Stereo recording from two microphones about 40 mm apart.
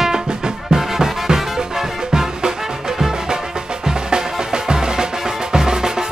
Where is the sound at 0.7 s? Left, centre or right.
Centre.